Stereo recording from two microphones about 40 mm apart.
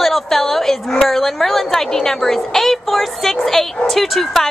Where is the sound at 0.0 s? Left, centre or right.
Centre.